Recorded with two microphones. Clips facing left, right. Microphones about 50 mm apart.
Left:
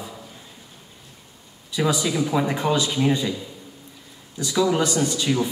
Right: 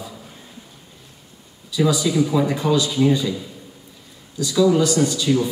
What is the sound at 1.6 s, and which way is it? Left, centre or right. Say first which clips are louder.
Speech: right 3 dB; left.